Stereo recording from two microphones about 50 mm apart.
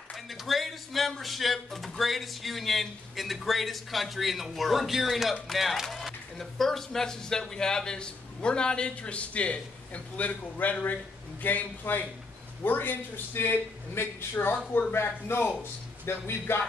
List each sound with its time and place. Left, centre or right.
0.1 s a man's voice: centre; by 16.6 s left